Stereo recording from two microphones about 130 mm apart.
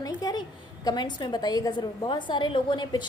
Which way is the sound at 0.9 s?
35° left (ahead or behind).